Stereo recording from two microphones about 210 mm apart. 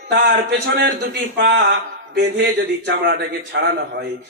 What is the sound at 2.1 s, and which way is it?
A man's voice, 55° right (ahead or behind).